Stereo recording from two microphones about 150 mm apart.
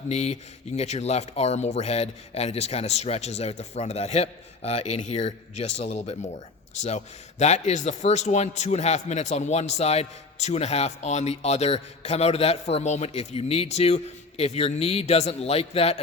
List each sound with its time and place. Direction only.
0.1 s a man's voice: 45° left (ahead or behind)